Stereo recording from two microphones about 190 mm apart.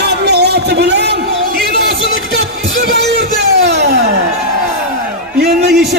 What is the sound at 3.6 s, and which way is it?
Music, 65° right (ahead or behind).